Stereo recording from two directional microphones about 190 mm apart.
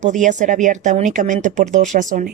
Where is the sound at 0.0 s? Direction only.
40° right (ahead or behind).